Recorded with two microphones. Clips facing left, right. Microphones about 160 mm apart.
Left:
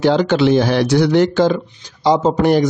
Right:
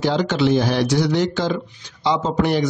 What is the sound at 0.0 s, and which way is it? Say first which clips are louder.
Speech: left 5 dB; 60° left (ahead or behind).